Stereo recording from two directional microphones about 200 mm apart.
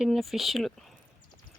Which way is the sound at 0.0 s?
Centre (ahead or behind).